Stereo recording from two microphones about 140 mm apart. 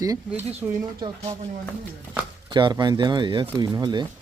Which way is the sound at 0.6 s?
25° right (ahead or behind).